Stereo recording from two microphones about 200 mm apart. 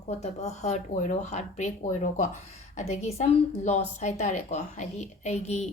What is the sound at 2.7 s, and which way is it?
A woman's voice, 35° left (ahead or behind).